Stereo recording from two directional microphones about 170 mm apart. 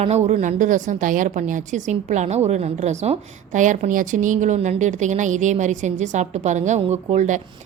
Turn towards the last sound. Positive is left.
turn(degrees=-45)  # may be behind; listen again after turning